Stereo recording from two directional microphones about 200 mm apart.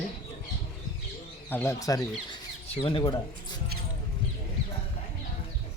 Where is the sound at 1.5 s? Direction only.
15° left (ahead or behind).